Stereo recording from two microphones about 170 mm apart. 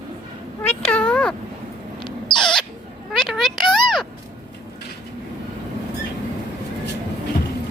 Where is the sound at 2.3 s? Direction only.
5° left (ahead or behind).